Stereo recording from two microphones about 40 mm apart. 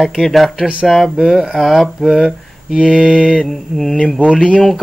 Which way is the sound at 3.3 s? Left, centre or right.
Centre.